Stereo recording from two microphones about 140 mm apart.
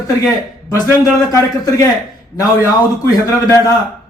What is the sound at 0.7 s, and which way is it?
A man's voice, 25° left (ahead or behind).